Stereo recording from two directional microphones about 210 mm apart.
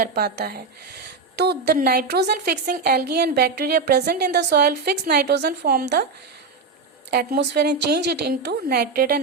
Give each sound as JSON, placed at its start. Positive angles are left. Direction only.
{"t": 0.0, "sound": "a woman's voice", "side_deg": -50}
{"t": 7.1, "sound": "a woman's voice", "side_deg": -50}